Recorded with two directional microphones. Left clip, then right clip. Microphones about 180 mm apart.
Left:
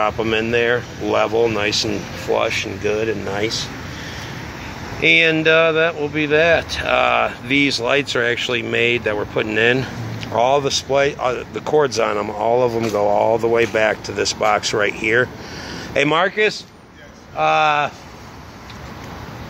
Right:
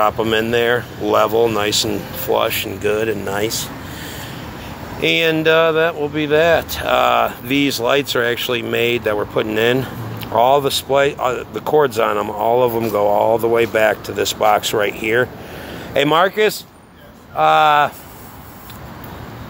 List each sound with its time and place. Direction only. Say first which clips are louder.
0.0 s speech: right 3 dB; 10° right (ahead or behind)
5.0 s speech: left 1 dB; 10° right (ahead or behind)